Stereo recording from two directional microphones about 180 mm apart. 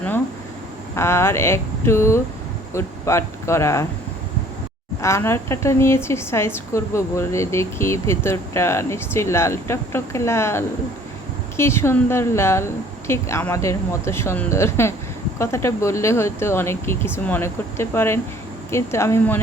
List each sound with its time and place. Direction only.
0.9 s a woman's voice: 15° left (ahead or behind)
5.0 s a woman's voice: 15° left (ahead or behind)